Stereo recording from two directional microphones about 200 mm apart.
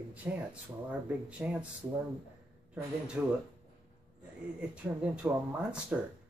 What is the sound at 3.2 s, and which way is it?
Speech, 10° right (ahead or behind).